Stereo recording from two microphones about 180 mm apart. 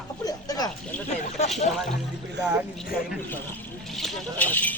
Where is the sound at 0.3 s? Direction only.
20° left (ahead or behind).